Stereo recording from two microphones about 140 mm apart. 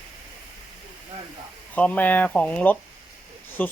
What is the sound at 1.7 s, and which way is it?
Speech, 10° left (ahead or behind).